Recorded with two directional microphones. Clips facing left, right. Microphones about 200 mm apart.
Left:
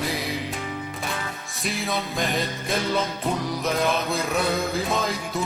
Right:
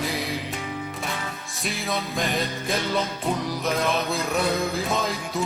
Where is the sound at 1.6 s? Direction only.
Centre (ahead or behind).